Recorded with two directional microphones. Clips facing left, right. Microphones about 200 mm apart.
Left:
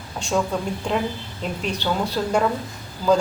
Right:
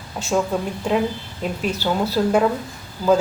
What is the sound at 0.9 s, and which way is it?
A woman's voice, 5° right (ahead or behind).